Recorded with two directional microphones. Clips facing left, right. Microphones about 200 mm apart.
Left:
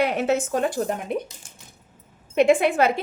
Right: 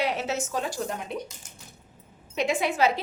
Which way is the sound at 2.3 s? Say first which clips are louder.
Left 9 dB; 55° left (ahead or behind).